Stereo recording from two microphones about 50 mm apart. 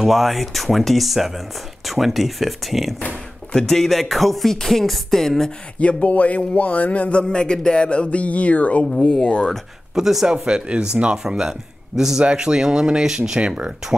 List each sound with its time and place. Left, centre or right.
0.0 s music: centre
5.8 s a sound: left
8.8 s speech: centre
9.9 s speech: centre